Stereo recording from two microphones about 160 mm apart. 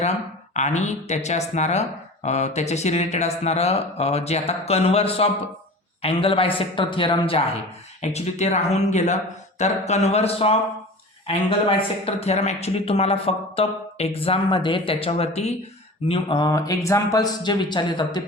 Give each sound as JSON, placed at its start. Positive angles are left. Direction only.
{"t": 0.0, "sound": "speech", "side_deg": 45}
{"t": 8.0, "sound": "speech", "side_deg": 45}
{"t": 16.5, "sound": "speech", "side_deg": 20}